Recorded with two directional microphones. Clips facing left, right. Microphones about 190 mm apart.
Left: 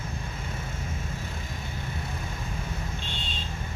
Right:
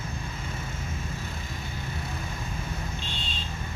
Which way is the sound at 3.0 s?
55° left (ahead or behind).